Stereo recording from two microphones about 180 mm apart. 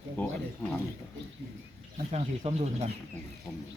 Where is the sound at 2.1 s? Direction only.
40° right (ahead or behind).